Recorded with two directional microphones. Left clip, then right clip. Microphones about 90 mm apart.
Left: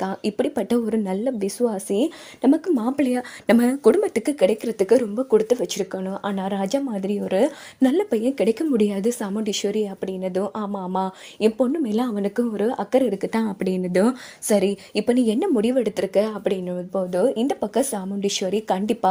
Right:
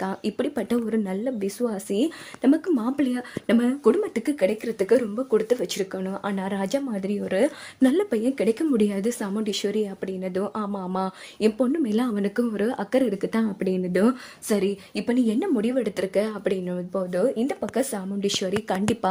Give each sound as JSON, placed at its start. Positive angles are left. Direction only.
{"t": 0.0, "sound": "speech", "side_deg": 25}
{"t": 0.9, "sound": "a woman's voice", "side_deg": 40}
{"t": 2.7, "sound": "speech", "side_deg": 40}
{"t": 3.8, "sound": "speech", "side_deg": 85}
{"t": 4.8, "sound": "speech", "side_deg": 30}
{"t": 10.4, "sound": "a woman's voice", "side_deg": 15}
{"t": 13.4, "sound": "speech", "side_deg": 60}
{"t": 17.2, "sound": "speech", "side_deg": 35}
{"t": 18.2, "sound": "a woman's voice", "side_deg": 15}